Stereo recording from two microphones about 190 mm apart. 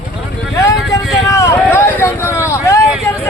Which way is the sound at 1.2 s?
15° left (ahead or behind).